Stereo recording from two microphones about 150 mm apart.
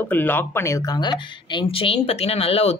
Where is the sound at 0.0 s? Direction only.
15° left (ahead or behind).